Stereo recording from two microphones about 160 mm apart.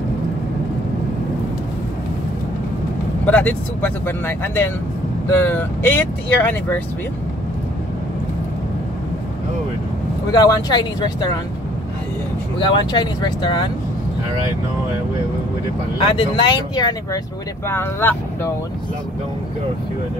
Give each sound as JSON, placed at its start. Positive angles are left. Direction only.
{"t": 3.3, "sound": "speech", "side_deg": 10}
{"t": 10.3, "sound": "speech", "side_deg": 25}
{"t": 12.5, "sound": "speech", "side_deg": 30}
{"t": 16.0, "sound": "speech", "side_deg": 30}
{"t": 17.6, "sound": "speech", "side_deg": 15}